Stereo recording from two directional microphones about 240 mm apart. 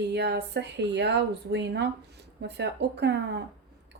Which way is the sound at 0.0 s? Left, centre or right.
Right.